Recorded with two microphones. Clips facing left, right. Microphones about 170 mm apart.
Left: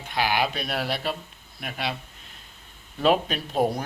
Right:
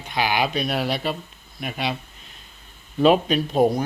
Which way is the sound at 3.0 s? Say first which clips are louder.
Right 5 dB; centre (ahead or behind).